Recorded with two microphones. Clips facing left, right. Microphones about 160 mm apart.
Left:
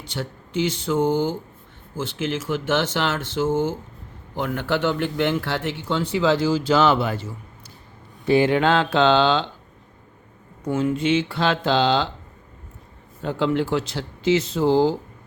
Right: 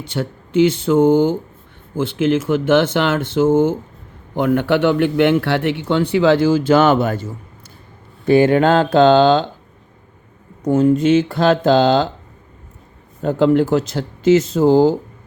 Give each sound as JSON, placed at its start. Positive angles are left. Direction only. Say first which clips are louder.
{"t": 0.0, "sound": "a man's voice", "louder": "right 7 dB", "side_deg": -55}
{"t": 8.3, "sound": "speech", "louder": "right 5 dB", "side_deg": -50}
{"t": 10.6, "sound": "speech", "louder": "right 8 dB", "side_deg": -40}
{"t": 13.2, "sound": "speech", "louder": "right 8 dB", "side_deg": -45}